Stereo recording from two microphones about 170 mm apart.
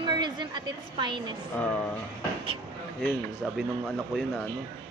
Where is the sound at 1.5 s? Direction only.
10° left (ahead or behind).